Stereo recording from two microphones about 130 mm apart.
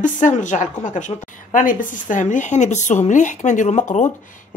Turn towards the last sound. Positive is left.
turn(degrees=85)